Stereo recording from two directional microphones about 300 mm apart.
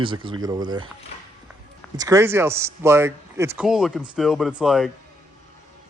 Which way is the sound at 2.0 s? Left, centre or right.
Centre.